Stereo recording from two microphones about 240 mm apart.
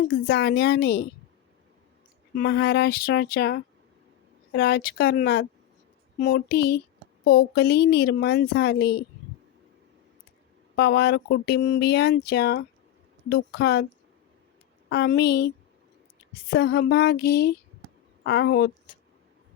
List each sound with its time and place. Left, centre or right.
0.3 s speech: left
2.3 s speech: left
6.2 s a sound: left
7.3 s speech: left
10.8 s speech: left
13.2 s a sound: left
14.8 s speech: left
16.5 s a sound: left
18.2 s a woman's voice: left